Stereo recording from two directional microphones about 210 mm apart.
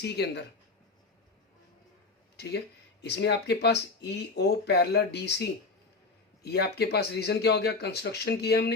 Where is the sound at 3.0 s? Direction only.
50° left (ahead or behind).